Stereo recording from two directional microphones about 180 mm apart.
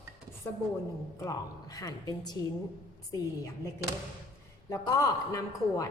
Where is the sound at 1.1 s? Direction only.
20° left (ahead or behind).